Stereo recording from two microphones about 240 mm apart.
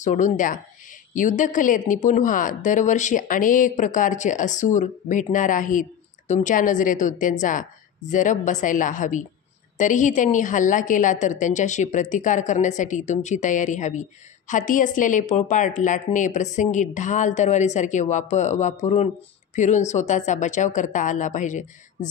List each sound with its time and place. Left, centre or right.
0.0 s a woman's voice: left